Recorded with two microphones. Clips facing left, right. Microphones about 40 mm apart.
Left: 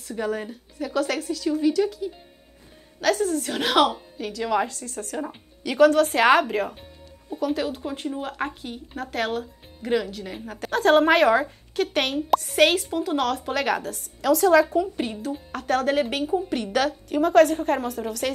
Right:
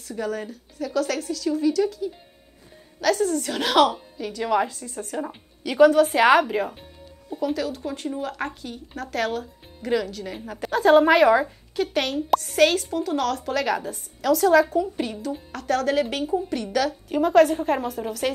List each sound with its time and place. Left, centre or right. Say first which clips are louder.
0.0 s a woman's voice: left 1 dB; left
3.2 s speech: right 1 dB; centre
4.3 s a woman's voice: right 1 dB; centre
7.5 s a woman's voice: even; left
10.3 s speech: right 1 dB; centre
11.7 s a woman's voice: left 1 dB; left
14.2 s speech: even; centre
14.7 s a woman's voice: even; centre
17.1 s speech: even; centre